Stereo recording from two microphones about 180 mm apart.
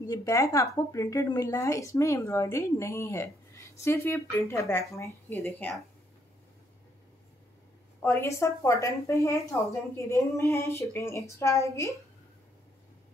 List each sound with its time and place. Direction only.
0.0 s a woman's voice: 20° left (ahead or behind)
8.0 s a woman's voice: 10° left (ahead or behind)